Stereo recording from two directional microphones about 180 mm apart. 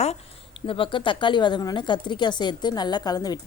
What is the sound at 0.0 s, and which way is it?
Speech, 30° left (ahead or behind).